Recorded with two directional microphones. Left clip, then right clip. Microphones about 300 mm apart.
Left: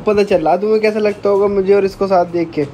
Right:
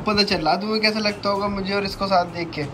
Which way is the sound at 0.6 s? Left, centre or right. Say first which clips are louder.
Left 8 dB; right.